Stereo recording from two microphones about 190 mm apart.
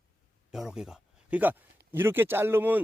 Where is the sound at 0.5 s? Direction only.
Centre (ahead or behind).